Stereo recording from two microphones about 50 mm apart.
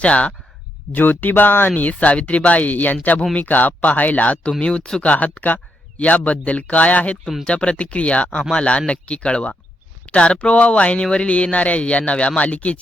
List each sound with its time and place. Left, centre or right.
0.0 s speech: left
0.9 s speech: left
1.7 s speech: left
4.6 s speech: centre